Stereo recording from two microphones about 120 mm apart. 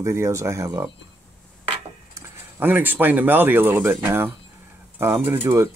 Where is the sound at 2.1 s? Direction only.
15° right (ahead or behind).